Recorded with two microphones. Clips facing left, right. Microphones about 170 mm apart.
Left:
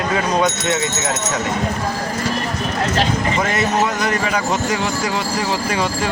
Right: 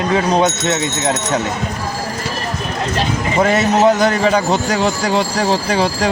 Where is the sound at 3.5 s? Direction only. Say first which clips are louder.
Right 6 dB; 30° right (ahead or behind).